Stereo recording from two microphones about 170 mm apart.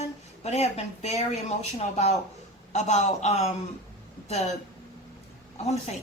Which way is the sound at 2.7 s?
45° left (ahead or behind).